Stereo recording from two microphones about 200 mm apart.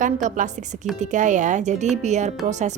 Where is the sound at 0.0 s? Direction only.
40° right (ahead or behind).